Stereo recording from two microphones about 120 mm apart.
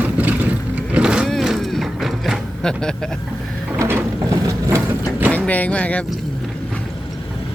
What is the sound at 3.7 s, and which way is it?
Ratchet, 20° right (ahead or behind).